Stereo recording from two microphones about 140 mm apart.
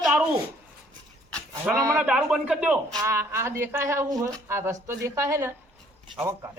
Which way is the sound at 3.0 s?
20° right (ahead or behind).